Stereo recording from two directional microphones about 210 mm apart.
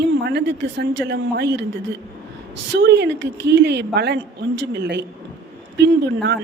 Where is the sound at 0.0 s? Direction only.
50° right (ahead or behind).